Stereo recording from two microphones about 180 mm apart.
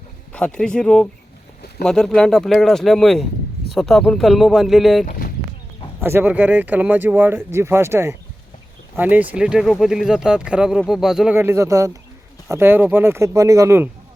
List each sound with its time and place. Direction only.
0.3 s speech: 5° left (ahead or behind)
6.0 s speech: 15° right (ahead or behind)
11.3 s speech: 15° right (ahead or behind)